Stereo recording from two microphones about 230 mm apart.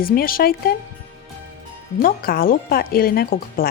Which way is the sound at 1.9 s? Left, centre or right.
Left.